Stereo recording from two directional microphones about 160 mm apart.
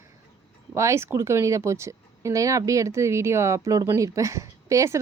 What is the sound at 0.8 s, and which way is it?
Speech, 15° right (ahead or behind).